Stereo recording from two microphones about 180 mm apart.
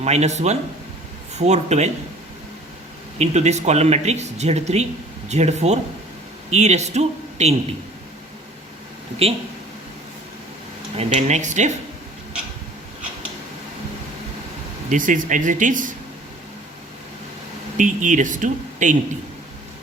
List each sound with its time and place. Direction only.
0.0 s speech: 40° right (ahead or behind)
3.2 s speech: 40° right (ahead or behind)
10.9 s speech: 40° right (ahead or behind)
14.8 s speech: 45° right (ahead or behind)
17.7 s speech: 45° right (ahead or behind)